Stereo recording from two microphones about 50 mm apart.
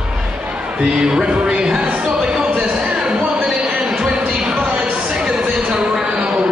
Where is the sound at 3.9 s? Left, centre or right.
Centre.